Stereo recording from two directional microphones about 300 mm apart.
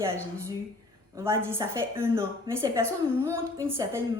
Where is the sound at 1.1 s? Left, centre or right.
Centre.